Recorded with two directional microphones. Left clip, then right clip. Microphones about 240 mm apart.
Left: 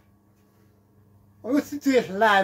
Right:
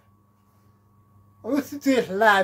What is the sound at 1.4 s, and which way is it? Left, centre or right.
Speech, right.